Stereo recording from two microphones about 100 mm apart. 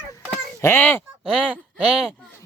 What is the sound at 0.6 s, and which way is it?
Speech, 20° left (ahead or behind).